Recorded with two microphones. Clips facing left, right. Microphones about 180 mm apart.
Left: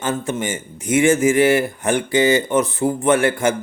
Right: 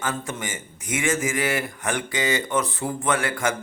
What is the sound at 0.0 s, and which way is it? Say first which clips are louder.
A man's voice: left 7 dB; 25° left (ahead or behind).